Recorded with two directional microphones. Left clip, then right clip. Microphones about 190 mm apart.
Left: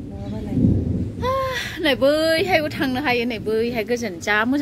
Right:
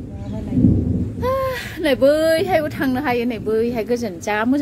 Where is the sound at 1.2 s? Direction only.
Centre (ahead or behind).